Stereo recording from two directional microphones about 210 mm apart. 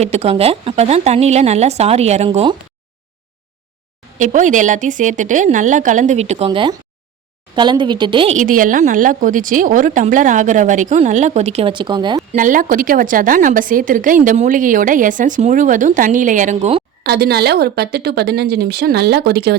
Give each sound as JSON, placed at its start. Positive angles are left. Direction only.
{"t": 0.0, "sound": "a woman's voice", "side_deg": -30}
{"t": 4.2, "sound": "a woman's voice", "side_deg": -35}
{"t": 12.4, "sound": "a woman's voice", "side_deg": -40}
{"t": 17.0, "sound": "a woman's voice", "side_deg": -50}